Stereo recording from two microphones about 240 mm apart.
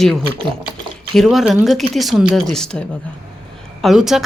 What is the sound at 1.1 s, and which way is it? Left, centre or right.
A woman's voice, centre.